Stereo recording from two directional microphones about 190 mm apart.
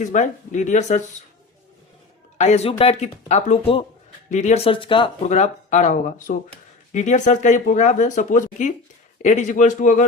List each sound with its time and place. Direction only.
0.0 s speech: 40° left (ahead or behind)
2.4 s speech: 35° left (ahead or behind)